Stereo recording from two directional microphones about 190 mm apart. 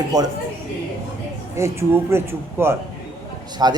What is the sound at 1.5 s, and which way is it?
A man's voice, 15° right (ahead or behind).